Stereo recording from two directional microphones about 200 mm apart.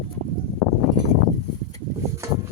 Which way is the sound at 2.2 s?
15° right (ahead or behind).